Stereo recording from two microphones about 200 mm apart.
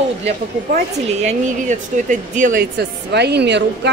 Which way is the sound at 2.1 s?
40° right (ahead or behind).